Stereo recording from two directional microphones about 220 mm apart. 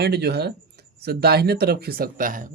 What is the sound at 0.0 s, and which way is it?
Speech, 50° right (ahead or behind).